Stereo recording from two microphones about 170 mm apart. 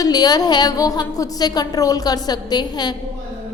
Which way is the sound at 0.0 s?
25° left (ahead or behind).